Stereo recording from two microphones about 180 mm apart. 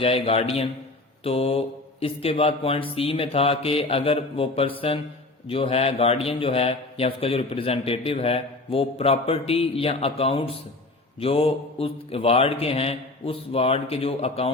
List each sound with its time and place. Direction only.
0.0 s a man's voice: 30° left (ahead or behind)